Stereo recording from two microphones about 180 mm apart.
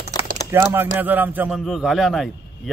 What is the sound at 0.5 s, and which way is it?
A man's voice, 15° right (ahead or behind).